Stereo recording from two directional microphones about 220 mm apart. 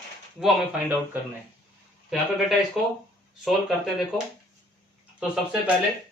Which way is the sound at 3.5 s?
Centre (ahead or behind).